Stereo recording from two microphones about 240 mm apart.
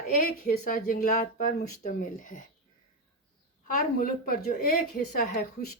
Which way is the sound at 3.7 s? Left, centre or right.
Left.